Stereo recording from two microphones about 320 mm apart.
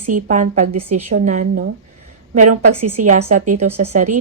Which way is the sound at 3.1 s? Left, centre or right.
Right.